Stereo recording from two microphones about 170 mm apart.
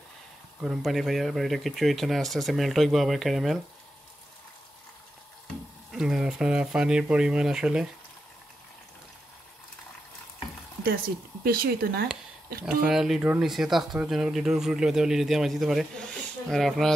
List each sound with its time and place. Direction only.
0.6 s speech: centre (ahead or behind)
5.9 s speech: 5° right (ahead or behind)
11.4 s speech: 60° right (ahead or behind)
12.8 s speech: 5° right (ahead or behind)